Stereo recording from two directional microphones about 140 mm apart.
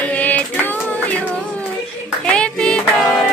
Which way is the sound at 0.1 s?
10° left (ahead or behind).